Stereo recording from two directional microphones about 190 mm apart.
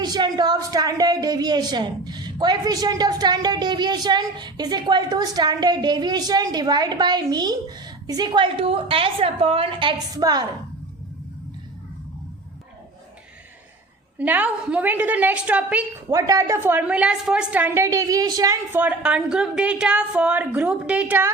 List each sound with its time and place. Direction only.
0.0 s a woman's voice: 20° right (ahead or behind)
14.2 s a woman's voice: 10° right (ahead or behind)
16.1 s a woman's voice: 20° right (ahead or behind)